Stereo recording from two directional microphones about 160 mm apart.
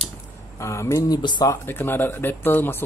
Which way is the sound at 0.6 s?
15° left (ahead or behind).